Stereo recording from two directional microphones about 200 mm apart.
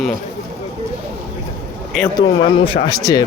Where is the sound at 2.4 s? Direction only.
25° left (ahead or behind).